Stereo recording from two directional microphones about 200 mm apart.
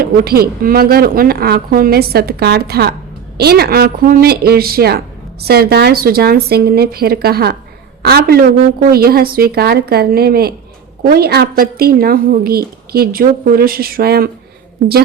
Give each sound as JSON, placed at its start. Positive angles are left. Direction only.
{"t": 0.0, "sound": "speech", "side_deg": -50}